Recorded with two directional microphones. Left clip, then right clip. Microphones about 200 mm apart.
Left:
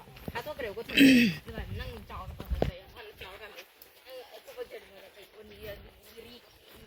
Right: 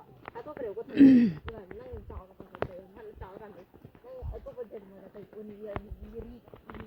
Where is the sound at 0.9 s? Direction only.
25° right (ahead or behind).